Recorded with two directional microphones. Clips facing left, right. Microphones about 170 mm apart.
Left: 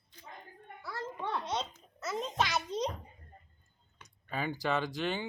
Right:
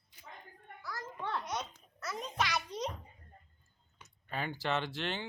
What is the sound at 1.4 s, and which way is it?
A woman's voice, 25° left (ahead or behind).